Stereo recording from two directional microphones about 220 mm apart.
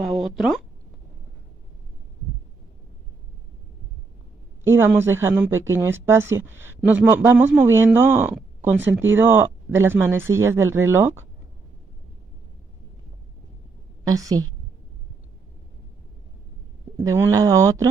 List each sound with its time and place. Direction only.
4.6 s a man's voice: 10° right (ahead or behind)
14.0 s a man's voice: 15° right (ahead or behind)
17.0 s a man's voice: 15° right (ahead or behind)